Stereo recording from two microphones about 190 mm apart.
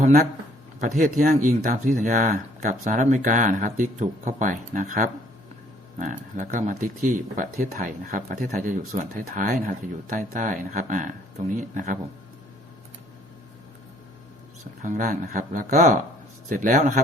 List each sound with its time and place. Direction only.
0.0 s speech: 50° right (ahead or behind)
14.8 s a man's voice: 45° right (ahead or behind)